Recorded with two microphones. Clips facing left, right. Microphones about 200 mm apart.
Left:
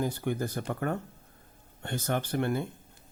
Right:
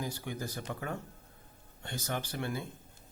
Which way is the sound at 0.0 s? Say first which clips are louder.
Left 8 dB; 55° left (ahead or behind).